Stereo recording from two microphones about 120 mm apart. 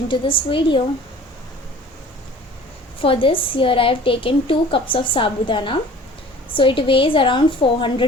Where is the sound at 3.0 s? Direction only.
50° left (ahead or behind).